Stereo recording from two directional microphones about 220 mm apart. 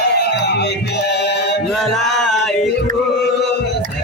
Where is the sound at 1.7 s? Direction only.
Centre (ahead or behind).